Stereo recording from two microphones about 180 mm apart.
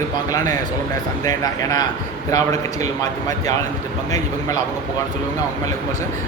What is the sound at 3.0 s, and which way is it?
Speech, 20° left (ahead or behind).